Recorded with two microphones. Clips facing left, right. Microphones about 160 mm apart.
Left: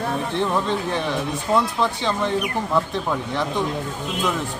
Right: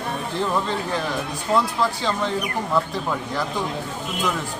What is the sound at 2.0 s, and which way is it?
Speech, 15° left (ahead or behind).